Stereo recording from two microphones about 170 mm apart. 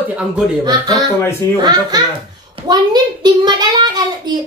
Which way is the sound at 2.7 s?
25° right (ahead or behind).